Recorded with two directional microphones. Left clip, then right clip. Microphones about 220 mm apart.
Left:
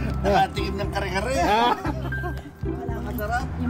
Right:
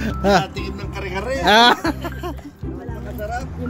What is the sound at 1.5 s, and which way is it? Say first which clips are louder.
Speech: right 11 dB; 50° right (ahead or behind).